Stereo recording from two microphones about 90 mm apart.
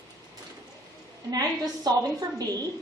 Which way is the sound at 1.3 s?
45° right (ahead or behind).